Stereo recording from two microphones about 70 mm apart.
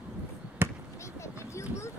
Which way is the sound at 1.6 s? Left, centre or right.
Left.